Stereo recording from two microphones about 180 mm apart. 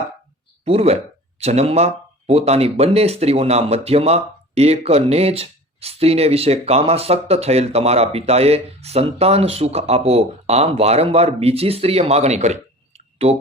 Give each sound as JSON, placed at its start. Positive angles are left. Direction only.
{"t": 0.6, "sound": "speech", "side_deg": -35}